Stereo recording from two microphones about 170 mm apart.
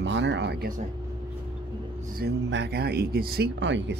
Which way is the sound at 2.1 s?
80° right.